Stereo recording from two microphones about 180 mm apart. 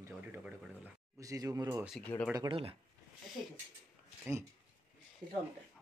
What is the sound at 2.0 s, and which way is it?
Speech, 10° left (ahead or behind).